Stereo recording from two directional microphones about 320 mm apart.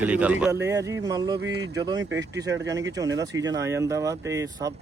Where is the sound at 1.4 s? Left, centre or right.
Right.